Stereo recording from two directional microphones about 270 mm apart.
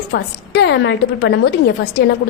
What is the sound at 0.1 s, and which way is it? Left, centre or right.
A woman's voice, left.